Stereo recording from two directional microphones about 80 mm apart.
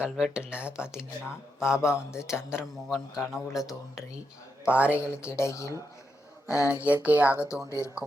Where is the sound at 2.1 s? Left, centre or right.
Left.